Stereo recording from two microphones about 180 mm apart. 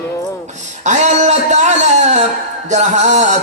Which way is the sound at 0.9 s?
40° right (ahead or behind).